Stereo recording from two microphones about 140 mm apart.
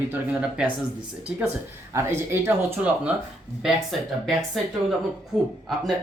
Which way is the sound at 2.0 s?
15° right (ahead or behind).